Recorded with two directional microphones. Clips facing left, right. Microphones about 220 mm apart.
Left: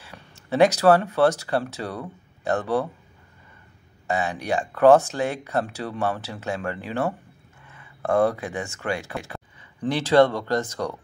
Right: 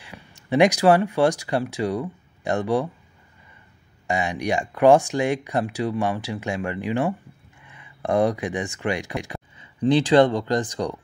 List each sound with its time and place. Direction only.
0.0 s speech: 15° right (ahead or behind)
4.1 s speech: 15° right (ahead or behind)